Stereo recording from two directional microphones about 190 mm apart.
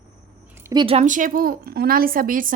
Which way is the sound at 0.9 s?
40° right (ahead or behind).